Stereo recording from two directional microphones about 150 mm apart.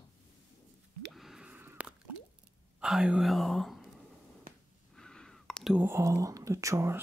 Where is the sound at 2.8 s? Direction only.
5° right (ahead or behind).